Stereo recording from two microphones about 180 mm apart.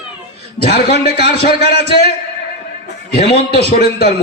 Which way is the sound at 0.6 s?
65° left (ahead or behind).